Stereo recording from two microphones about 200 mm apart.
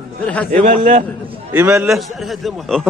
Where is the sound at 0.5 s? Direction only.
40° right (ahead or behind).